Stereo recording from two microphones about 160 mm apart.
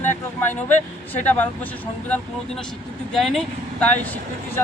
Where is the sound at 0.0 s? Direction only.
15° left (ahead or behind).